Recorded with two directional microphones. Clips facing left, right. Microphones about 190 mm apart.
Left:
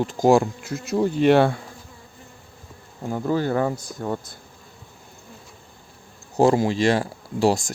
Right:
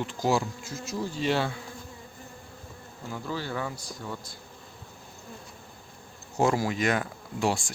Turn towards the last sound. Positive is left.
turn(degrees=40)  # may be behind; listen again after turning